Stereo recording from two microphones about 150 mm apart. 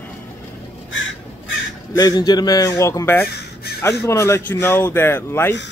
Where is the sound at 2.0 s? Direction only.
25° left (ahead or behind).